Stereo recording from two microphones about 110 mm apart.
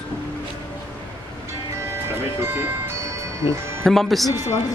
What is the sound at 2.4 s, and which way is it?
Music, 20° right (ahead or behind).